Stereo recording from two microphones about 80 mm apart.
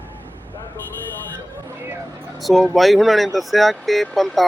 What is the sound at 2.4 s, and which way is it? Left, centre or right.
Speech, centre.